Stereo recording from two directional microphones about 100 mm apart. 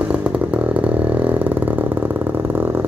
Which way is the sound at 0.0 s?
15° right (ahead or behind).